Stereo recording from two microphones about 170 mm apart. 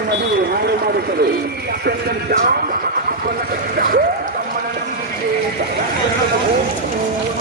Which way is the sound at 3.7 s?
60° right (ahead or behind).